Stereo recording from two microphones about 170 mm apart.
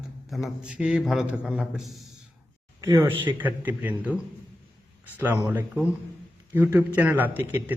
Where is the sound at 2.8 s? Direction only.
25° right (ahead or behind).